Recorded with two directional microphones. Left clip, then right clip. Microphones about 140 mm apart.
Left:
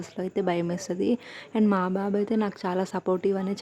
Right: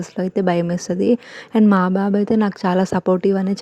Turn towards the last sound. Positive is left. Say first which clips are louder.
# right 8 dB
turn(degrees=-40)  # may be behind; listen again after turning